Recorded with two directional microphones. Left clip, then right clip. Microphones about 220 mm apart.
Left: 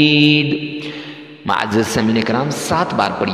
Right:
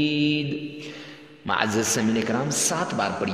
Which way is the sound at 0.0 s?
35° left (ahead or behind).